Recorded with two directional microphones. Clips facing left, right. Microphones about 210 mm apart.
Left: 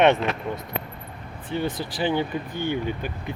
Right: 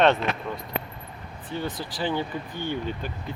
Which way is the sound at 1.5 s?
25° left (ahead or behind).